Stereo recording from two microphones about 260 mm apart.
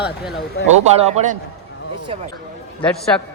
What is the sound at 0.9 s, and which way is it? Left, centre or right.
Speech, right.